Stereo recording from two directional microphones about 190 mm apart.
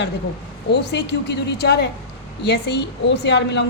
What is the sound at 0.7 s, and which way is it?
A woman's voice, 65° left (ahead or behind).